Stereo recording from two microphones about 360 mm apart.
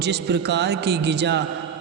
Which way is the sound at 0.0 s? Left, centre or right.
Right.